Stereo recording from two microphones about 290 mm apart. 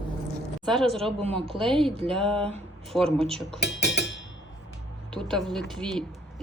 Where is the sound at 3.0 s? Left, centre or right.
Centre.